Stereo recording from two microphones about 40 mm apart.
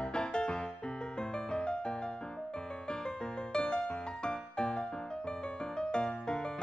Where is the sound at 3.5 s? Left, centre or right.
Left.